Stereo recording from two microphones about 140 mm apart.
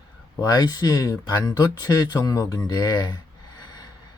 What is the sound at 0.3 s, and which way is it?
Speech, 30° left (ahead or behind).